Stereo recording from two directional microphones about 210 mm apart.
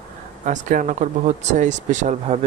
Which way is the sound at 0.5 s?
35° right (ahead or behind).